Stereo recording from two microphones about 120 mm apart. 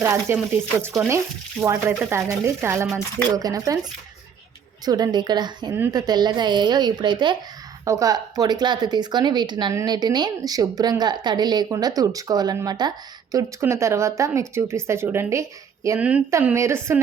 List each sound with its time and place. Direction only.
0.0 s speech: 20° right (ahead or behind)
4.9 s a woman's voice: 35° right (ahead or behind)
7.9 s a woman's voice: 30° right (ahead or behind)
13.3 s speech: 25° right (ahead or behind)
16.0 s a woman's voice: 10° right (ahead or behind)
16.6 s speech: 20° right (ahead or behind)